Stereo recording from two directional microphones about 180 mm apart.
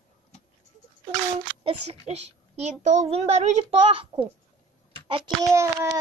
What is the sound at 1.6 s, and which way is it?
A child's voice, 30° right (ahead or behind).